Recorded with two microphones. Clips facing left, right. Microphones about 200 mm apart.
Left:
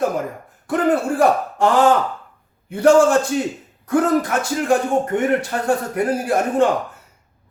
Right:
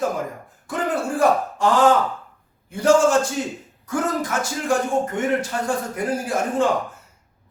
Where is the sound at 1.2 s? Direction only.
60° left (ahead or behind).